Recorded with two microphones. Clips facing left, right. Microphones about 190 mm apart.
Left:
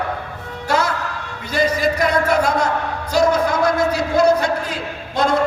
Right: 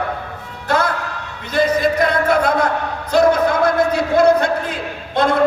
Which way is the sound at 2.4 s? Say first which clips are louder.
Right 2 dB; 55° right (ahead or behind).